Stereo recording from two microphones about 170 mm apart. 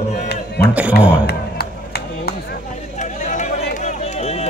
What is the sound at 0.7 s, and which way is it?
Speech, 10° right (ahead or behind).